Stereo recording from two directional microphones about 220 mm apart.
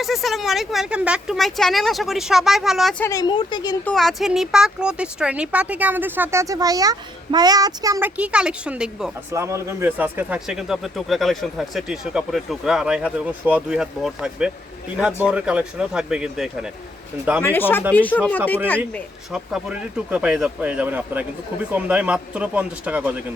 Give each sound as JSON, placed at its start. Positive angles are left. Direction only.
{"t": 0.0, "sound": "speech", "side_deg": 0}
{"t": 3.0, "sound": "speech", "side_deg": 15}
{"t": 3.8, "sound": "speech", "side_deg": 0}
{"t": 17.4, "sound": "speech", "side_deg": 10}